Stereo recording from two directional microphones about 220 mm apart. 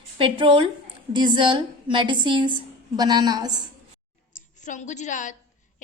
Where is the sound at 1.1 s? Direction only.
20° right (ahead or behind).